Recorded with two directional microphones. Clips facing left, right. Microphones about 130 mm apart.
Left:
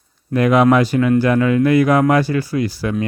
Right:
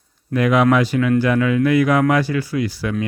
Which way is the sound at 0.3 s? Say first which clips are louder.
Left 2 dB; 40° left (ahead or behind).